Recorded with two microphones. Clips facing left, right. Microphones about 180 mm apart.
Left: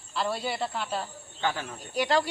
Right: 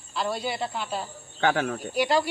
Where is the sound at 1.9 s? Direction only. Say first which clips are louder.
Right 1 dB; 5° right (ahead or behind).